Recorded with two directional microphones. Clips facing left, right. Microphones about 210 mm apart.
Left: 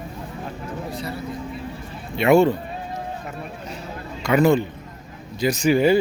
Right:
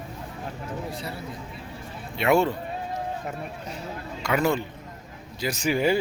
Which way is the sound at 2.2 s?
Centre (ahead or behind).